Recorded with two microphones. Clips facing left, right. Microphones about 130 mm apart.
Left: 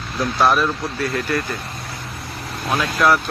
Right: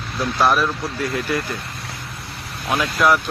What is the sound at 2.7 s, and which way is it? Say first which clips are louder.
Speech: even; 5° right (ahead or behind).